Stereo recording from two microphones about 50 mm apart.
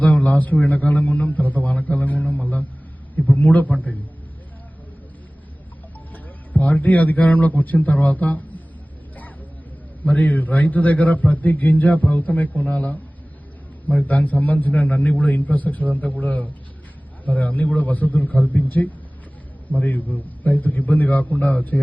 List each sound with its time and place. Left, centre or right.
0.0 s a man's voice: left
6.5 s a man's voice: left
10.0 s a man's voice: left